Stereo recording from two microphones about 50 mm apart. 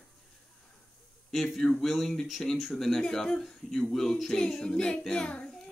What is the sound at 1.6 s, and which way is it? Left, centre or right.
Speech, centre.